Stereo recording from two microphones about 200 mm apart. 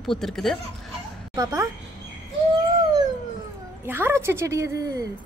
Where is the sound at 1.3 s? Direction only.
20° right (ahead or behind).